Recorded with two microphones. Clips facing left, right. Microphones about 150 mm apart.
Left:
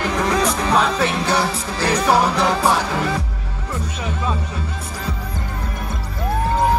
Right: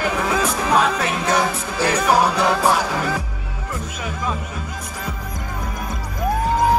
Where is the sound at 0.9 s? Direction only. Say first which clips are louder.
Left 1 dB; 30° left (ahead or behind).